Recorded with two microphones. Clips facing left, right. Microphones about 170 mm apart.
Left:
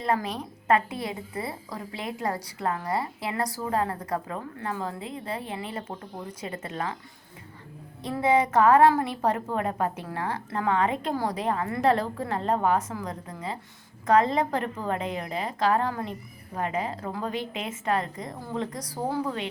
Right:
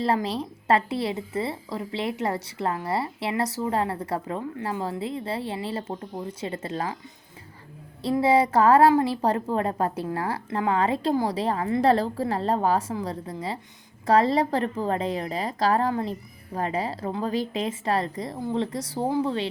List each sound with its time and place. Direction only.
0.0 s a woman's voice: 30° right (ahead or behind)
8.2 s a woman's voice: 30° right (ahead or behind)